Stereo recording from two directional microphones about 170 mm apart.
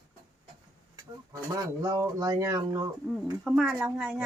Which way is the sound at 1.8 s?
20° right (ahead or behind).